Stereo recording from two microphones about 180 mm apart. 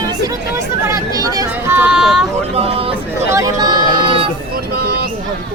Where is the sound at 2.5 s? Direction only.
30° right (ahead or behind).